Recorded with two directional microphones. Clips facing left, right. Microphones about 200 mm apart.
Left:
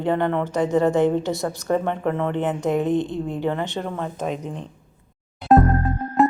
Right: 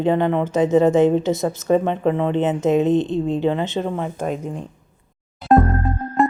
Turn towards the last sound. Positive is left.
turn(degrees=0)  # may be behind; listen again after turning